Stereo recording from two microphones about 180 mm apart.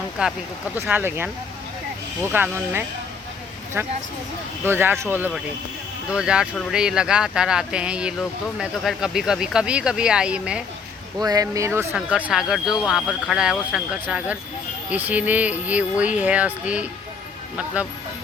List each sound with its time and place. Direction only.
0.2 s speech: 5° right (ahead or behind)
2.3 s speech: 10° right (ahead or behind)
11.2 s speech: 20° right (ahead or behind)